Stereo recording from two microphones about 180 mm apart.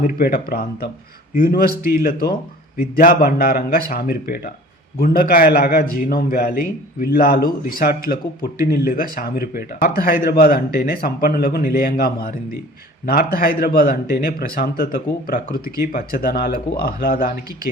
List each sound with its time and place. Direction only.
0.0 s a man's voice: 50° left (ahead or behind)